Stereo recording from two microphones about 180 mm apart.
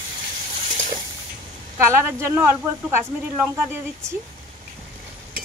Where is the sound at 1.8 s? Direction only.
15° right (ahead or behind).